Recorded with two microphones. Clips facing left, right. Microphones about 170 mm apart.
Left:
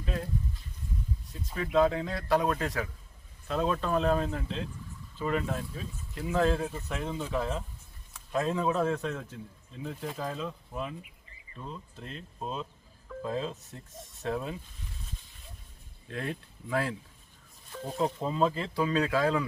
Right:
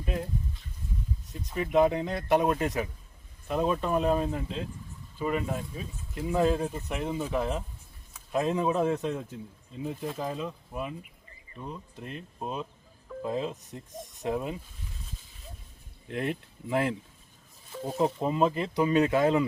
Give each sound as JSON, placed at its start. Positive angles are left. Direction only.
{"t": 1.5, "sound": "speech", "side_deg": -20}
{"t": 16.0, "sound": "speech", "side_deg": -20}
{"t": 17.9, "sound": "speech", "side_deg": -15}